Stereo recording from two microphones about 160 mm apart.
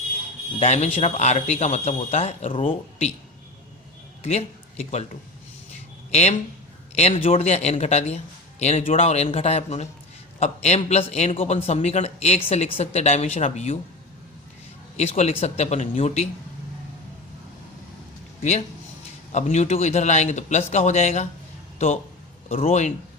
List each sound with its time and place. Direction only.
0.6 s a man's voice: 40° left (ahead or behind)
4.2 s speech: 40° left (ahead or behind)
6.1 s a man's voice: 45° left (ahead or behind)
14.9 s a man's voice: 40° left (ahead or behind)
19.3 s a man's voice: 45° left (ahead or behind)
22.4 s a man's voice: 40° left (ahead or behind)